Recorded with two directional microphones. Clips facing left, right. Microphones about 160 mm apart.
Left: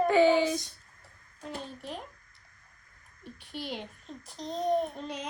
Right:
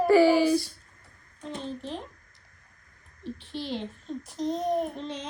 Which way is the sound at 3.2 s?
10° left (ahead or behind).